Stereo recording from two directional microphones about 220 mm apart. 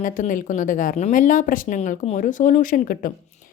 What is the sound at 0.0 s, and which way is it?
A woman's voice, 35° left (ahead or behind).